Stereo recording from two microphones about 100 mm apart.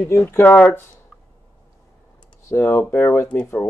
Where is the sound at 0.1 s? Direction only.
25° left (ahead or behind).